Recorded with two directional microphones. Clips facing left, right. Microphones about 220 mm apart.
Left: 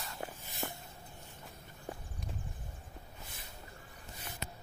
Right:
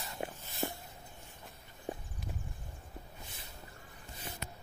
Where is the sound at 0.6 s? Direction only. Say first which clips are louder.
Right 4 dB; 20° right (ahead or behind).